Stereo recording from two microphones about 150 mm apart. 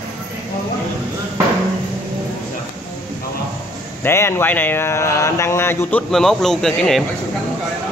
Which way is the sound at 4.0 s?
15° left (ahead or behind).